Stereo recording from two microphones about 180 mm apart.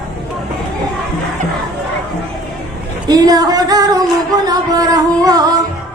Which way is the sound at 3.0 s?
20° right (ahead or behind).